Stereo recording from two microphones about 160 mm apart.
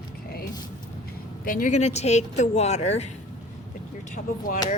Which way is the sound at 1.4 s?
55° left (ahead or behind).